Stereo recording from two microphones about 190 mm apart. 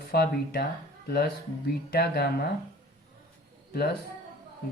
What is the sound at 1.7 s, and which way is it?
Speech, 55° left (ahead or behind).